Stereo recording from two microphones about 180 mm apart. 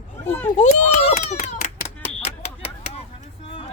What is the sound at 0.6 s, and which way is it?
Children playing, 40° left (ahead or behind).